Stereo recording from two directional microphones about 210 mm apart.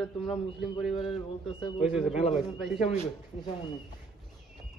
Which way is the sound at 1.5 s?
25° left (ahead or behind).